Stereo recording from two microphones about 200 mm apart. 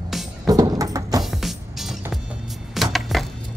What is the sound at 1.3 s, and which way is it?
Music, centre (ahead or behind).